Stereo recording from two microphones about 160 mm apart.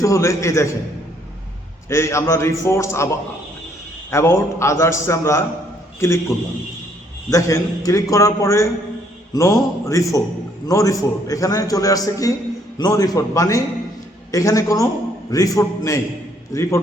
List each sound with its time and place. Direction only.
0.0 s a man's voice: 20° left (ahead or behind)
1.9 s a man's voice: 20° left (ahead or behind)